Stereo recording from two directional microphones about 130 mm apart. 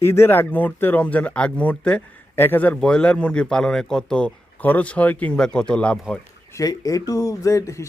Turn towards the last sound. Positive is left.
turn(degrees=25)  # may be behind; listen again after turning